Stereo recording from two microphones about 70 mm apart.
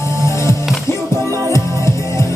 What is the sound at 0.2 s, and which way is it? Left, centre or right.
Music, left.